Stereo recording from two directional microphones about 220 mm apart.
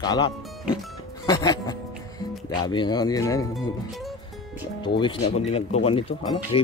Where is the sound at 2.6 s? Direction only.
20° left (ahead or behind).